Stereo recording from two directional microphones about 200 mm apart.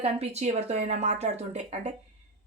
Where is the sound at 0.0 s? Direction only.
35° right (ahead or behind).